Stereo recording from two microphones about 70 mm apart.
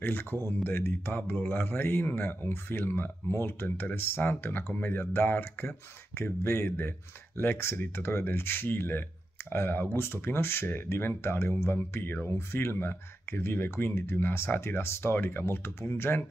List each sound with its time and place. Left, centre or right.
0.0 s speech: left